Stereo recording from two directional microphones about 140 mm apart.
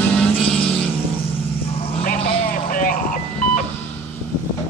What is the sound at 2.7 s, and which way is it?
Music, 80° left.